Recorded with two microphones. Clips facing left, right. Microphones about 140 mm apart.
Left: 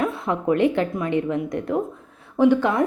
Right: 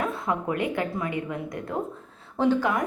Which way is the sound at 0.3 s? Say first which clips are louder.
Left 9 dB; 25° left (ahead or behind).